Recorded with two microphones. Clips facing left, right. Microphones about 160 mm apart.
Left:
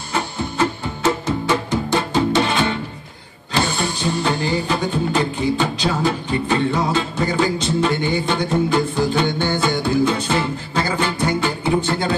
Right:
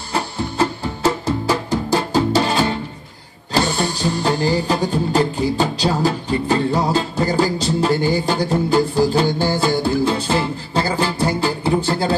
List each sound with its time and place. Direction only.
0.1 s music: 35° right (ahead or behind)